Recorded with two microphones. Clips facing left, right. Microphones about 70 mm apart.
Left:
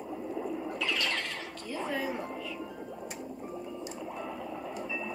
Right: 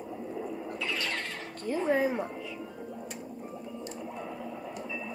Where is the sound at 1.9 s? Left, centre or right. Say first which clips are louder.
Right 7 dB; right.